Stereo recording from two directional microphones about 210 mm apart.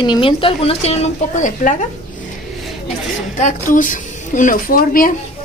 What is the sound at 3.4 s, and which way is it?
A woman's voice, 40° left (ahead or behind).